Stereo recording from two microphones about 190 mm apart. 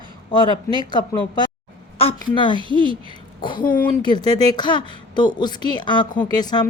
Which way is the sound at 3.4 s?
25° left (ahead or behind).